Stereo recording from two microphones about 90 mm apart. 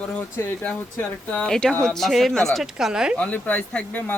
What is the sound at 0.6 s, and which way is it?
Speech, 15° left (ahead or behind).